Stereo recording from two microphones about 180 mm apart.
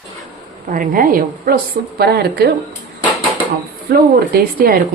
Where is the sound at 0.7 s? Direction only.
50° right (ahead or behind).